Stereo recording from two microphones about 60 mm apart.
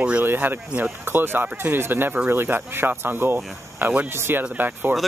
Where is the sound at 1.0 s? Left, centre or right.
Right.